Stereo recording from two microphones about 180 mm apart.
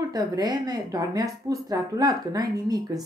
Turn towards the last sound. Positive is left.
turn(degrees=-20)  # may be behind; listen again after turning